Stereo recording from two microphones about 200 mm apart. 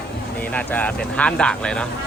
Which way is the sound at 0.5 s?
5° left (ahead or behind).